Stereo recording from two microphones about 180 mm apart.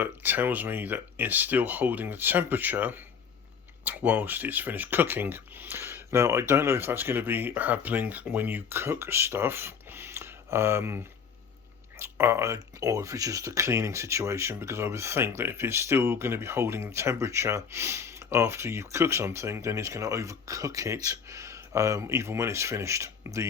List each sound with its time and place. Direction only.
0.0 s speech: 10° right (ahead or behind)